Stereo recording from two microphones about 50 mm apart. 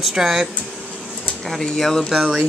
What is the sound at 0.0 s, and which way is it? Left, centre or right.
Speech, centre.